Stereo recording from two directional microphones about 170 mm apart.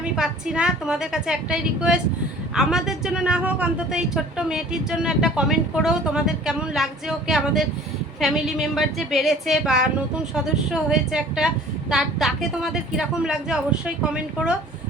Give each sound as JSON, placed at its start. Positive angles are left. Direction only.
{"t": 0.0, "sound": "a woman's voice", "side_deg": -5}